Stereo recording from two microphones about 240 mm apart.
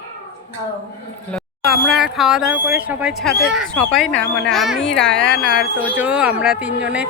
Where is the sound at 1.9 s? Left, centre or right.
Centre.